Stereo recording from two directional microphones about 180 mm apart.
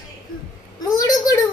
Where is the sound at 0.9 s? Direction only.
20° left (ahead or behind).